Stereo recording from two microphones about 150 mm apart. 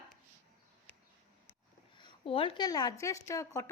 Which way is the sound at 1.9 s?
35° left (ahead or behind).